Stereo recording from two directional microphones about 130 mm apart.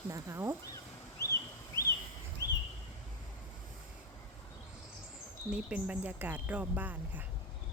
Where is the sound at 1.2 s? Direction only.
25° left (ahead or behind).